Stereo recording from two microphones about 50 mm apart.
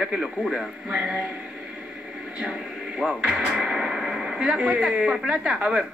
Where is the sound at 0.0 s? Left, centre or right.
Centre.